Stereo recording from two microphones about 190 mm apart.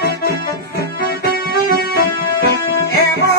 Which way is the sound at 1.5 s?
55° left (ahead or behind).